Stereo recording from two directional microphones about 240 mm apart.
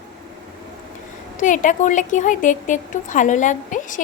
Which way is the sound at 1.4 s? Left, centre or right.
Left.